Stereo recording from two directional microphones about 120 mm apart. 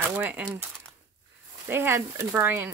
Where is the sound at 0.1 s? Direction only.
15° right (ahead or behind).